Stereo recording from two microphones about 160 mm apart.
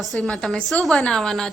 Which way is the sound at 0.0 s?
Centre (ahead or behind).